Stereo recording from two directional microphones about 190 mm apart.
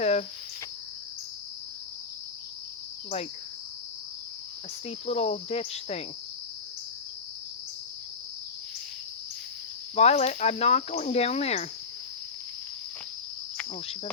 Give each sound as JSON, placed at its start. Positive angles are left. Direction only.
{"t": 0.0, "sound": "cricket", "side_deg": 35}
{"t": 4.9, "sound": "speech", "side_deg": 35}
{"t": 9.9, "sound": "speech", "side_deg": 35}